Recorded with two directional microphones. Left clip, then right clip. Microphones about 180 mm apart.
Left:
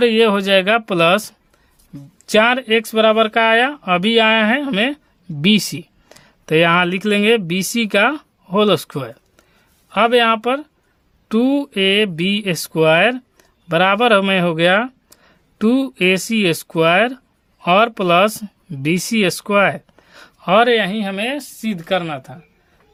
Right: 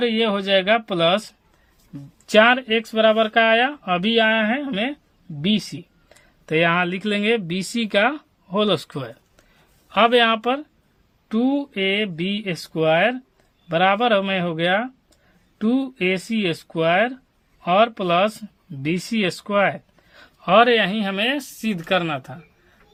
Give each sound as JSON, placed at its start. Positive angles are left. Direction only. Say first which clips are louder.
{"t": 0.0, "sound": "speech", "louder": "left 7 dB", "side_deg": 40}
{"t": 2.2, "sound": "speech", "louder": "left 1 dB", "side_deg": 25}
{"t": 11.3, "sound": "speech", "louder": "left 5 dB", "side_deg": 45}